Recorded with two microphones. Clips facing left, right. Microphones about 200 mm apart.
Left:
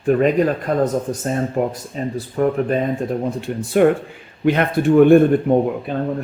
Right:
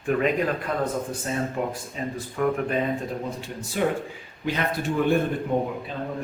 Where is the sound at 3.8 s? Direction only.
60° left (ahead or behind).